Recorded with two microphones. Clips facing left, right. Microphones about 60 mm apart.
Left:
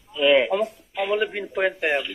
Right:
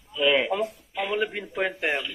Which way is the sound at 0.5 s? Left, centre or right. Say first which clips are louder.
Left 4 dB; centre.